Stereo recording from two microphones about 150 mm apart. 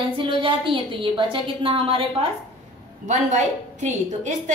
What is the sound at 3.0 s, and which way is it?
A woman's voice, 50° right (ahead or behind).